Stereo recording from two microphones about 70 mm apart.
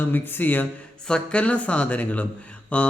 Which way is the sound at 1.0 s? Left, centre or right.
Centre.